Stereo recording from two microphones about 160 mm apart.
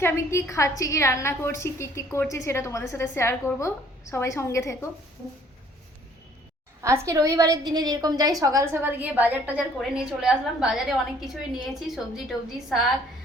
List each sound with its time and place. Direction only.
0.0 s a woman's voice: 15° left (ahead or behind)
6.8 s a woman's voice: 20° right (ahead or behind); by 12.8 s centre (ahead or behind)